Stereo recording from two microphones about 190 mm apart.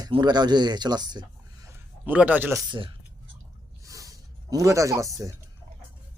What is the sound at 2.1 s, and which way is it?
Speech, 10° right (ahead or behind).